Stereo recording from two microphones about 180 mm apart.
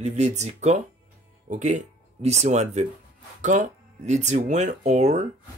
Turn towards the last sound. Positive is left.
turn(degrees=-40)  # may be behind; listen again after turning